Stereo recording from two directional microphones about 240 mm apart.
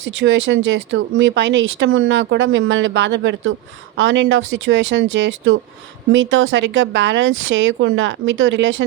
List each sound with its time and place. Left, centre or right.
0.2 s speech: right